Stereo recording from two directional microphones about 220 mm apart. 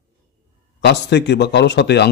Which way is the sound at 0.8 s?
50° left (ahead or behind).